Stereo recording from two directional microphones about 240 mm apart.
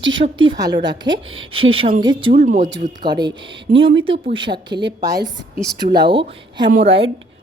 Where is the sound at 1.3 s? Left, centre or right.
Right.